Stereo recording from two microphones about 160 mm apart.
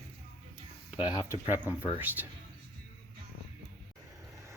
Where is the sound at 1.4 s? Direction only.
10° right (ahead or behind).